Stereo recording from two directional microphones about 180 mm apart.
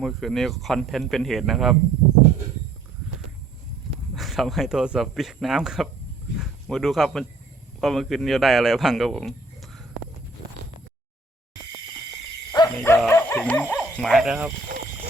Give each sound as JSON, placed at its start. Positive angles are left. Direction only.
{"t": 0.0, "sound": "speech", "side_deg": 0}
{"t": 4.1, "sound": "a man's voice", "side_deg": 0}
{"t": 12.5, "sound": "livestock", "side_deg": 20}
{"t": 13.1, "sound": "dog", "side_deg": 15}